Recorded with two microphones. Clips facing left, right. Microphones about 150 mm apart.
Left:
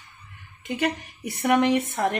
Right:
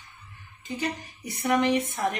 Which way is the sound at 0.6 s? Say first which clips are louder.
Left 5 dB; 70° left (ahead or behind).